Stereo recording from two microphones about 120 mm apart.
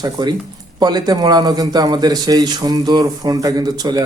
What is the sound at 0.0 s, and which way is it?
A man's voice, 35° right (ahead or behind).